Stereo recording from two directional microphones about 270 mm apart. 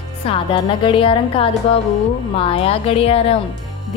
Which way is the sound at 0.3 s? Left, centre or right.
Centre.